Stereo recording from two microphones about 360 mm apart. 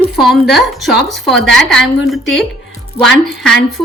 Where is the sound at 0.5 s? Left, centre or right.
Centre.